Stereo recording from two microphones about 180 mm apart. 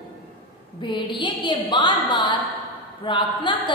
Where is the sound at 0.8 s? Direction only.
25° left (ahead or behind).